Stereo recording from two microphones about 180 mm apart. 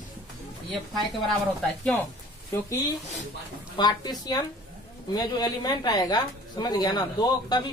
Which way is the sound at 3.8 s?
20° left (ahead or behind).